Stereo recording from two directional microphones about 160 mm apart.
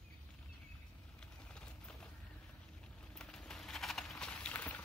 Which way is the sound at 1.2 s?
5° left (ahead or behind).